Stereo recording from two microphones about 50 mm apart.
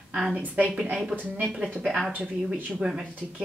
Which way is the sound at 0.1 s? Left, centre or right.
Centre.